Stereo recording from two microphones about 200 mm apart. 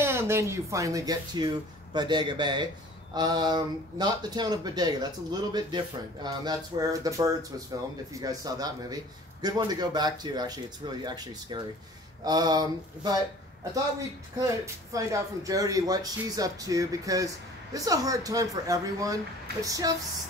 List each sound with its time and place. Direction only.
0.0 s a man's voice: 10° right (ahead or behind)
14.4 s speech: 15° right (ahead or behind)